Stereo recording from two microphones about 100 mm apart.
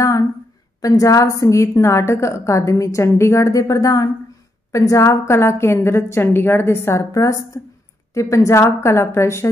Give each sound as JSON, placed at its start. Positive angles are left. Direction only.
{"t": 0.7, "sound": "a woman's voice", "side_deg": 35}